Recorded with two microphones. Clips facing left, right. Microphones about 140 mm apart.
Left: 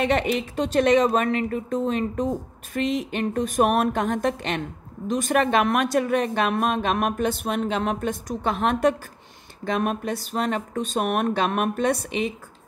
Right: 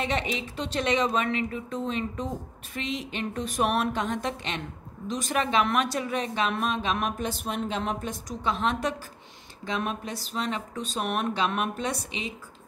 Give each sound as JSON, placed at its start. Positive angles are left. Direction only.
{"t": 0.0, "sound": "a woman's voice", "side_deg": 55}